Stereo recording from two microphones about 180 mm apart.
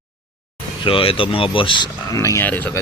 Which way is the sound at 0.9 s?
30° left (ahead or behind).